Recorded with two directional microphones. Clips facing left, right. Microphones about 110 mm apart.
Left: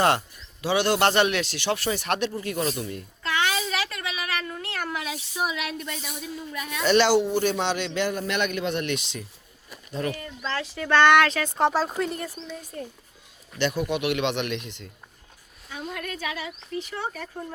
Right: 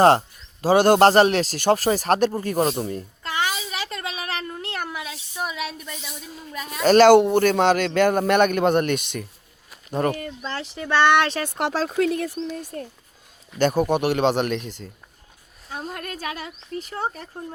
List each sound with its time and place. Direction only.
0.0 s a man's voice: 35° right (ahead or behind)
3.7 s cat: 25° right (ahead or behind)
5.1 s a sound: centre (ahead or behind)
6.5 s speech: 35° right (ahead or behind); by 10.3 s 50° right (ahead or behind)
10.5 s speech: 30° right (ahead or behind)
11.4 s speech: 80° right
12.5 s speech: 55° right (ahead or behind)
13.6 s a woman's voice: 45° right (ahead or behind)